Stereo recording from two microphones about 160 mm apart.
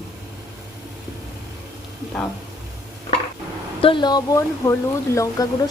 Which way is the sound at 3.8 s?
30° left (ahead or behind).